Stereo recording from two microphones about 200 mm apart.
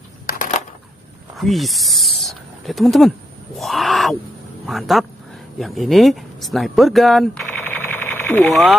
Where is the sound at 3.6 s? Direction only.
Centre (ahead or behind).